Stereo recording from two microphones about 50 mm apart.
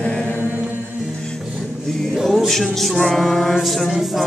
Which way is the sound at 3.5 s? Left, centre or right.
Centre.